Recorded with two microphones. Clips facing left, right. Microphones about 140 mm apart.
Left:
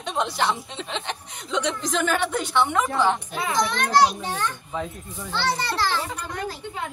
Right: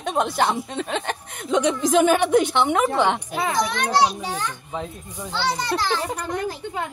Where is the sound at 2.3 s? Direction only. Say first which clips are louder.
Right 5 dB; 65° right (ahead or behind).